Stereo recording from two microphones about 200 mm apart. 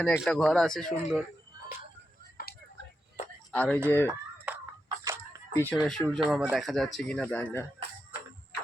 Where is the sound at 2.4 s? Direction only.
50° left (ahead or behind).